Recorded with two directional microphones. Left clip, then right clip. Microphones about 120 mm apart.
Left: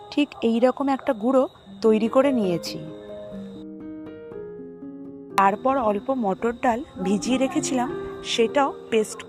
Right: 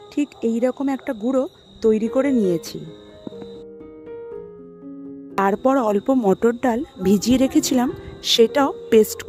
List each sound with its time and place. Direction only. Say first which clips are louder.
0.2 s speech: left 1 dB; 15° right (ahead or behind)
2.3 s speech: right 4 dB; 35° right (ahead or behind)
5.6 s a woman's voice: right 4 dB; 60° right (ahead or behind)